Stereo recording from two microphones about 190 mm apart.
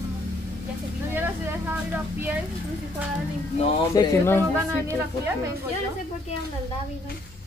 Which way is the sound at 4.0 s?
15° left (ahead or behind).